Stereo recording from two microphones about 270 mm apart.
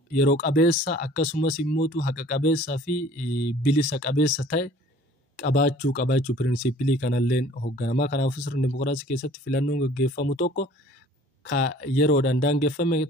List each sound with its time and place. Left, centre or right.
0.1 s speech: left